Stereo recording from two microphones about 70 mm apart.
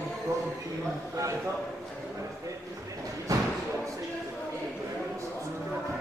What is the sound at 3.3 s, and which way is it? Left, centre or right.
Slam, right.